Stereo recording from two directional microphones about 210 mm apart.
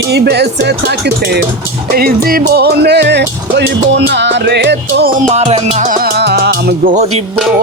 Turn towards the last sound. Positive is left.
turn(degrees=-35)  # may be behind; listen again after turning